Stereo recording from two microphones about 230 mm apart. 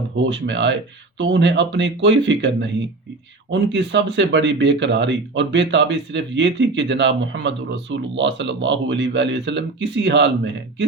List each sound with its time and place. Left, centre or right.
0.3 s speech: right